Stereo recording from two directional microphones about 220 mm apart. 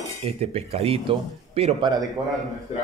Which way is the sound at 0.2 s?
30° right (ahead or behind).